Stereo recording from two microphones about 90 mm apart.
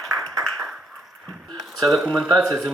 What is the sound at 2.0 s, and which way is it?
Speech, 10° right (ahead or behind).